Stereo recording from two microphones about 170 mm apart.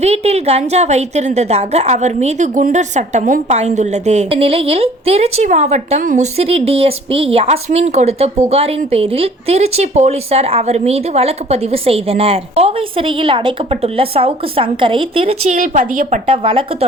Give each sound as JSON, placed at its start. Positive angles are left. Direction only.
{"t": 0.0, "sound": "a woman's voice", "side_deg": -40}
{"t": 15.5, "sound": "a woman's voice", "side_deg": -50}
{"t": 16.2, "sound": "a woman's voice", "side_deg": -30}